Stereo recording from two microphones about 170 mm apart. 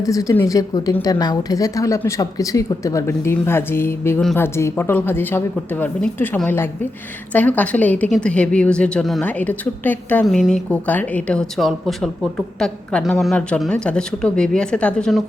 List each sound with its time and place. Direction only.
0.0 s a woman's voice: 20° left (ahead or behind)